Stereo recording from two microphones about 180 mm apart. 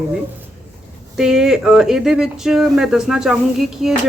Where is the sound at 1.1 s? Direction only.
5° right (ahead or behind).